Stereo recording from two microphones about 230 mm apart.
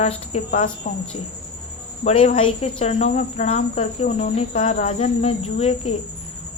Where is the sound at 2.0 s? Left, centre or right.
Left.